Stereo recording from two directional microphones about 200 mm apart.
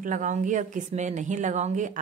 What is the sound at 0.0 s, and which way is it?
Speech, 40° right (ahead or behind).